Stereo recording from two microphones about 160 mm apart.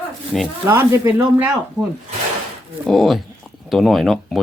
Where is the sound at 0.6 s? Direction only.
15° right (ahead or behind).